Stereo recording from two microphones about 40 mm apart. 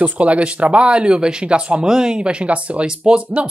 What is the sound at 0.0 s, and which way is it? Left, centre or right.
Speech, right.